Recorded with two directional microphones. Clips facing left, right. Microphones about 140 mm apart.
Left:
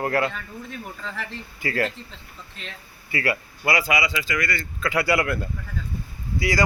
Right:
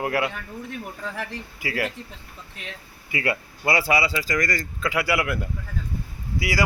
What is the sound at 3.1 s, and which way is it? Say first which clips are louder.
Speech: left 1 dB; 25° right (ahead or behind).